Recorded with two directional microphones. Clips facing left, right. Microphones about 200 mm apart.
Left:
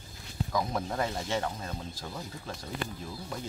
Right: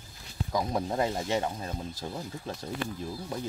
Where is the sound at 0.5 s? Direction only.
20° right (ahead or behind).